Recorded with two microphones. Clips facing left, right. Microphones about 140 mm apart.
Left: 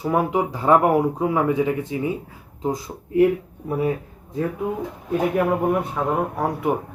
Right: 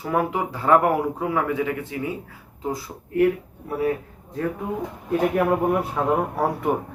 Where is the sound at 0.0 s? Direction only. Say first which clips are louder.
Left 3 dB; 15° left (ahead or behind).